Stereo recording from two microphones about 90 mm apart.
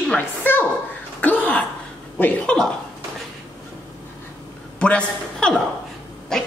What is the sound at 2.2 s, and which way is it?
Speech, 20° left (ahead or behind).